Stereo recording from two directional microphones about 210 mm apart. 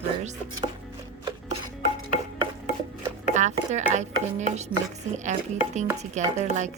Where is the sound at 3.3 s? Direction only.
35° right (ahead or behind).